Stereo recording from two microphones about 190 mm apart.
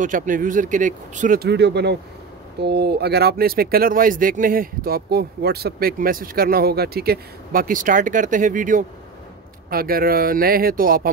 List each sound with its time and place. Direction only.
0.0 s speech: 45° right (ahead or behind)